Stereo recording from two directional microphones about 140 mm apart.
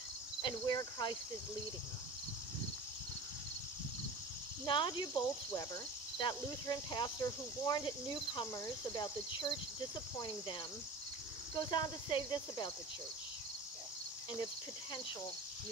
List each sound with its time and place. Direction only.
0.4 s speech: 35° left (ahead or behind)
4.6 s speech: 35° left (ahead or behind)
11.5 s speech: 30° left (ahead or behind)